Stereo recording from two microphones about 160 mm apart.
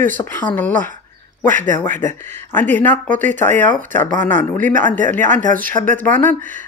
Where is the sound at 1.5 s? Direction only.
55° right (ahead or behind).